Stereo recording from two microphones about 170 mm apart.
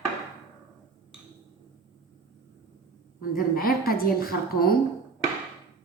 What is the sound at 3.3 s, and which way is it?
A woman's voice, 60° left (ahead or behind).